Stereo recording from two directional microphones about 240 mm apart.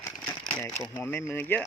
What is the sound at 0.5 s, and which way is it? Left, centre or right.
Speech, centre.